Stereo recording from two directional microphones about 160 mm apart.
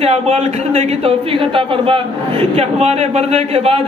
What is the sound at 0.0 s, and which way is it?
Speech, 40° right (ahead or behind).